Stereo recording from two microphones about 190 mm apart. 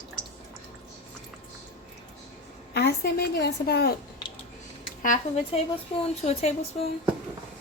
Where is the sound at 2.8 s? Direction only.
60° left (ahead or behind).